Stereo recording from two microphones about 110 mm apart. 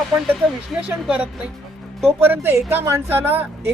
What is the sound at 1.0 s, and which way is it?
Speech, 10° right (ahead or behind).